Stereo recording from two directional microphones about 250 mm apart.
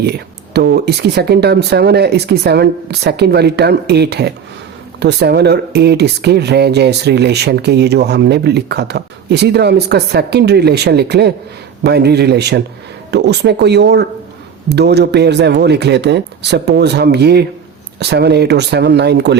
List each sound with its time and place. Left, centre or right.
0.0 s speech: right